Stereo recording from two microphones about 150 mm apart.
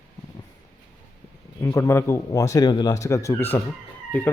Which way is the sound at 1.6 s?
20° left (ahead or behind).